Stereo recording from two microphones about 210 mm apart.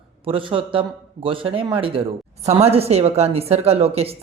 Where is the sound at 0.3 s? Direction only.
25° right (ahead or behind).